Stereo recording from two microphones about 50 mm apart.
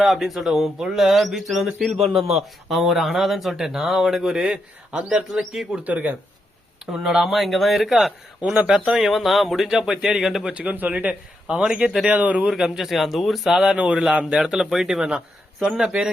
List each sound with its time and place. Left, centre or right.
0.0 s speech: centre
3.6 s speech: centre
5.8 s speech: right
6.9 s speech: centre
8.4 s a man's voice: right
8.9 s speech: centre
10.5 s a man's voice: right
12.5 s speech: centre
13.7 s a man's voice: right
14.7 s speech: centre